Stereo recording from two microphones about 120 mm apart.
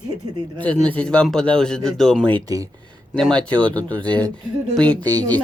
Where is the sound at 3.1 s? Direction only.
5° left (ahead or behind).